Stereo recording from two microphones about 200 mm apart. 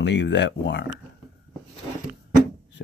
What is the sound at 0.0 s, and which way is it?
Speech, 60° left (ahead or behind).